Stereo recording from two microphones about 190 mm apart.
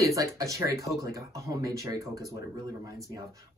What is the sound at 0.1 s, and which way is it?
Speech, 15° right (ahead or behind).